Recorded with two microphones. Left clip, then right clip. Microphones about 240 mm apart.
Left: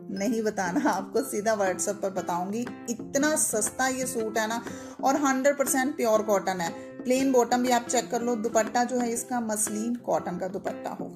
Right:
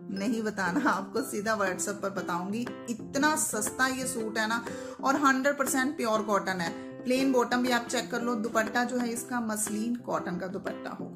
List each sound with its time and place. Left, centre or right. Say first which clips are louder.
0.1 s speech: left 4 dB; centre